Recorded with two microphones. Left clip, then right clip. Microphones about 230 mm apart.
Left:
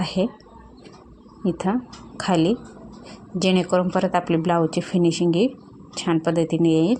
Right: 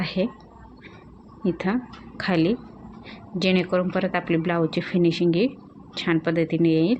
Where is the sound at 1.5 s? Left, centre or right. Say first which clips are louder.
Left 2 dB; centre.